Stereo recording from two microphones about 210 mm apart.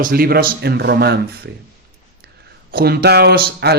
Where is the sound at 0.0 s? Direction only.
45° right (ahead or behind).